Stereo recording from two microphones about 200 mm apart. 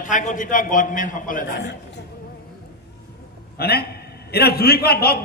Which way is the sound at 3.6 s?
50° left (ahead or behind).